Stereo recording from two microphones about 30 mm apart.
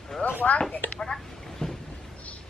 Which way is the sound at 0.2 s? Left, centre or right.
Left.